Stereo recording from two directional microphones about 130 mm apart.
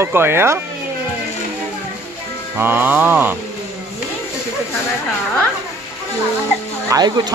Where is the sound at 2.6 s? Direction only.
15° right (ahead or behind).